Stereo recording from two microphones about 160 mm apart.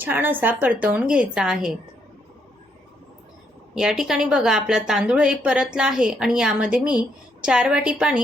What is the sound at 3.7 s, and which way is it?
A woman's voice, 5° right (ahead or behind).